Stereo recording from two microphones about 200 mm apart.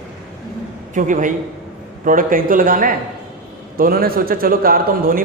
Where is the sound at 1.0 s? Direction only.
40° right (ahead or behind).